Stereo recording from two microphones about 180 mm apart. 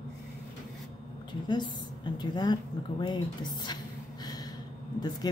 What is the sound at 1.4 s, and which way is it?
A woman's voice, 25° left (ahead or behind).